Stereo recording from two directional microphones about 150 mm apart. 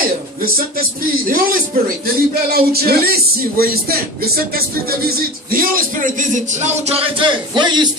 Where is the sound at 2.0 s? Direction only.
90° right.